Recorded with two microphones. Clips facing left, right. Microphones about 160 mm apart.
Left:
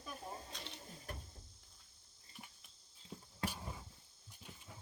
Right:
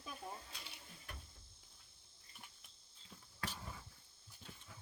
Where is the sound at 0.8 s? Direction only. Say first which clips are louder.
Left 6 dB; 40° left (ahead or behind).